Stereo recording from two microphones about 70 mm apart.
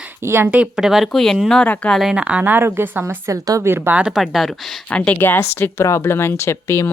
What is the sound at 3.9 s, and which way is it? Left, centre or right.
Speech, centre.